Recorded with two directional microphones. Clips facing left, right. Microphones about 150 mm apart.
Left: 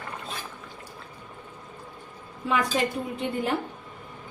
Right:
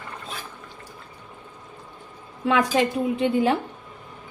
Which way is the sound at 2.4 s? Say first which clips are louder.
Right 5 dB; 90° right.